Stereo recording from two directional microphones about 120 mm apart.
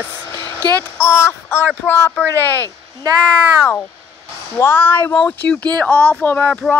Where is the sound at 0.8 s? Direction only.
20° left (ahead or behind).